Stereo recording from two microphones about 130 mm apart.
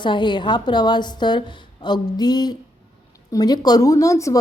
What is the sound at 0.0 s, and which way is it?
Speech, 35° left (ahead or behind).